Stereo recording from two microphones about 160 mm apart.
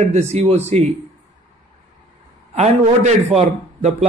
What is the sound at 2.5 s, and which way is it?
Speech, 45° right (ahead or behind).